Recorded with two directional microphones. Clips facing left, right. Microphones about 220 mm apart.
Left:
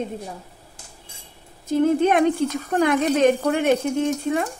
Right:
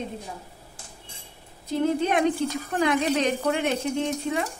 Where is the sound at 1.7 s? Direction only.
55° left (ahead or behind).